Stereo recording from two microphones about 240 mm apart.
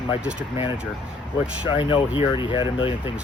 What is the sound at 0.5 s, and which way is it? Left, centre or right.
Speech, left.